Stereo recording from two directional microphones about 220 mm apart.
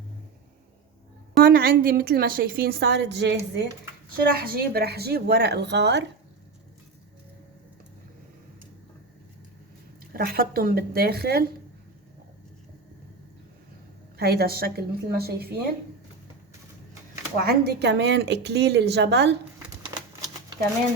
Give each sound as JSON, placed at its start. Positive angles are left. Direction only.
{"t": 1.4, "sound": "a woman's voice", "side_deg": -45}
{"t": 10.1, "sound": "a woman's voice", "side_deg": -40}
{"t": 14.2, "sound": "a woman's voice", "side_deg": -45}
{"t": 17.4, "sound": "a woman's voice", "side_deg": -45}